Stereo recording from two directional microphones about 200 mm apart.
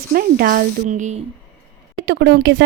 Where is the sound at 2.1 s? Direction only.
55° right (ahead or behind).